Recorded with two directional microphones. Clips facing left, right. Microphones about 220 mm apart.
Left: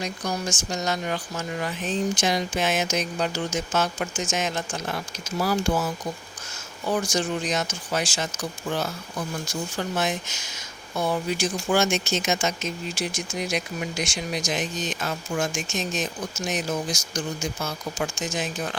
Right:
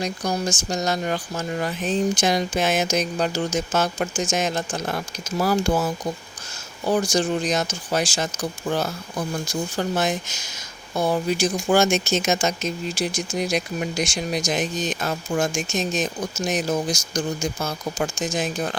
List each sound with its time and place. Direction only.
0.0 s speech: 35° right (ahead or behind)
5.4 s speech: 45° right (ahead or behind)
6.8 s speech: 35° right (ahead or behind)